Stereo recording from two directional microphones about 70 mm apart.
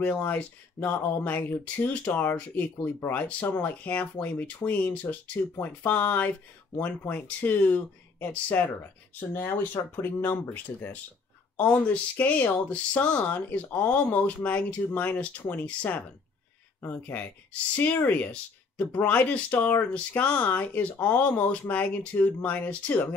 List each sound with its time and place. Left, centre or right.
0.0 s speech: left